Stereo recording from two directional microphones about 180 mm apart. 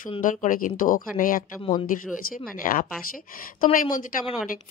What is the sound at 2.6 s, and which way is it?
A woman's voice, 50° left (ahead or behind).